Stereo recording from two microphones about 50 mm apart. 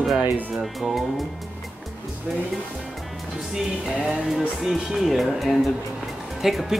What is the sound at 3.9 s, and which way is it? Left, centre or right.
Speech, centre.